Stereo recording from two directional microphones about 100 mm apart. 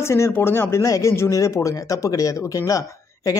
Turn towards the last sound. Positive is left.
turn(degrees=35)  # may be behind; listen again after turning